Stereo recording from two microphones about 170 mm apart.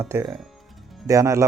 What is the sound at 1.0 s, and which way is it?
Speech, 20° right (ahead or behind).